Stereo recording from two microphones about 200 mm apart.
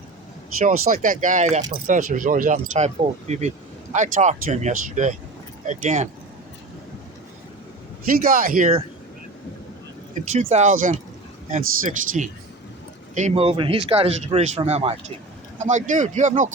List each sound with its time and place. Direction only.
0.9 s speech: 45° right (ahead or behind)
8.2 s speech: 45° right (ahead or behind)
10.2 s speech: 35° right (ahead or behind)